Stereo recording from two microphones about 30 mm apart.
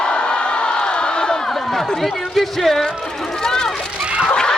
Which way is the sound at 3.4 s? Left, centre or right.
Left.